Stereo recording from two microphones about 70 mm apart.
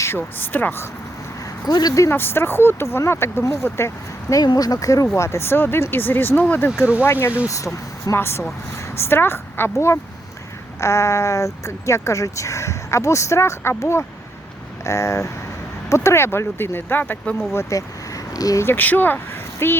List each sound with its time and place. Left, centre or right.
0.2 s speech: left
1.6 s speech: left
2.0 s speech: left
4.4 s speech: left
5.1 s speech: left
7.4 s speech: left
8.1 s speech: left
17.6 s speech: left
18.6 s speech: left